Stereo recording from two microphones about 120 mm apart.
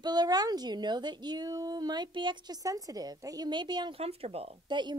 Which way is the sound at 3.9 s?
55° right (ahead or behind).